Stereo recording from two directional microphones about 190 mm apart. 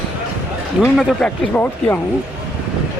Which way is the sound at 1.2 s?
10° left (ahead or behind).